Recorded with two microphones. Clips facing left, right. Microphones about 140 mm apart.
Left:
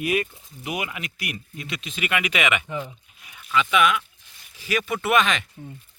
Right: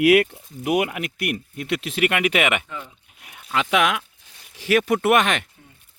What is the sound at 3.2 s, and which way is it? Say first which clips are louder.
Speech: left 1 dB; 65° right (ahead or behind).